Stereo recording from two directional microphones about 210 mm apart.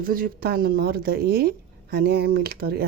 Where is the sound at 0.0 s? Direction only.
40° right (ahead or behind).